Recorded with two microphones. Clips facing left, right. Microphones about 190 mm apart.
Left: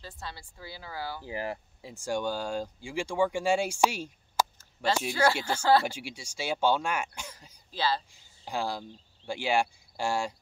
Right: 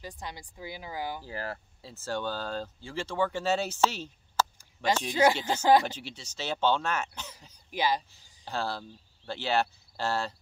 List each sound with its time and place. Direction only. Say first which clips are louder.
0.0 s speech: right 2 dB; 15° right (ahead or behind)
1.2 s speech: left 3 dB; 15° left (ahead or behind)
5.1 s speech: right 5 dB; 15° right (ahead or behind)
5.9 s speech: left 2 dB; 10° left (ahead or behind)
7.7 s speech: right 1 dB; 15° right (ahead or behind)
8.5 s speech: left 1 dB; 15° left (ahead or behind)